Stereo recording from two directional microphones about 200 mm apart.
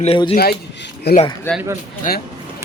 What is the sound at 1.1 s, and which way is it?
Speech, 55° left (ahead or behind).